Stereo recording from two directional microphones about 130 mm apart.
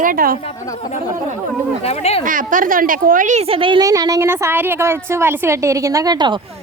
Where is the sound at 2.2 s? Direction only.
90° right.